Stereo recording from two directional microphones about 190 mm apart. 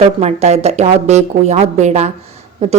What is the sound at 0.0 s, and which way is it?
A woman's voice, 35° right (ahead or behind).